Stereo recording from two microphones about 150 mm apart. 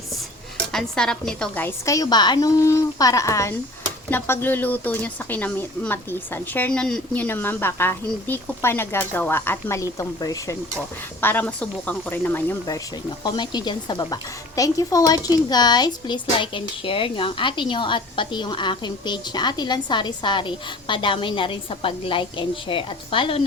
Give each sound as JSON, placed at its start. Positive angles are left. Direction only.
{"t": 0.7, "sound": "a woman's voice", "side_deg": 5}
{"t": 11.2, "sound": "speech", "side_deg": 10}
{"t": 13.2, "sound": "a woman's voice", "side_deg": 30}